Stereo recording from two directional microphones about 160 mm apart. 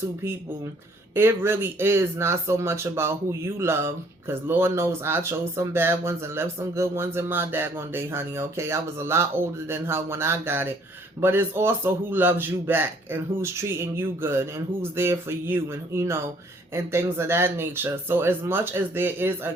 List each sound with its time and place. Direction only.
1.1 s speech: 15° right (ahead or behind)